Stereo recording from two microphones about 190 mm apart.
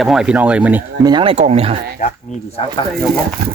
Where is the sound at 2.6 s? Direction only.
30° left (ahead or behind).